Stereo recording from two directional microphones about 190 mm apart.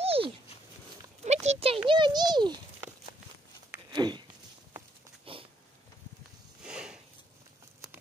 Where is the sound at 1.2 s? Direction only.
35° right (ahead or behind).